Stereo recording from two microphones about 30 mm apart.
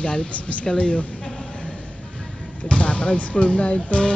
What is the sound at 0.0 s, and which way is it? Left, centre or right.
A woman's voice, left.